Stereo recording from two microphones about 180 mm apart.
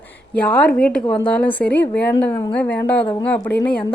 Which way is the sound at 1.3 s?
5° left (ahead or behind).